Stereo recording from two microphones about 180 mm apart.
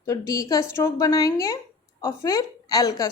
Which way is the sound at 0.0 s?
15° left (ahead or behind).